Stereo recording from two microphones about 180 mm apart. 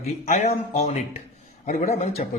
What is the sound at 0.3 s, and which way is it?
Speech, 35° left (ahead or behind).